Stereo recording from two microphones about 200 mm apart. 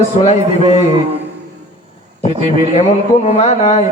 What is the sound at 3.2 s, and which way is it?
Speech, 30° left (ahead or behind).